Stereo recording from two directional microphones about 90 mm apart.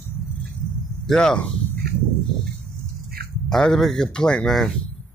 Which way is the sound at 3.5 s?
5° left (ahead or behind).